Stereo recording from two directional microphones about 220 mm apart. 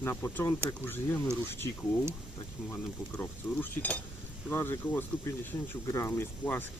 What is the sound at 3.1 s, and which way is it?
Sizzle, 10° left (ahead or behind).